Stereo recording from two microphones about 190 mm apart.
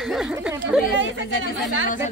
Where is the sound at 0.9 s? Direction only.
75° right (ahead or behind).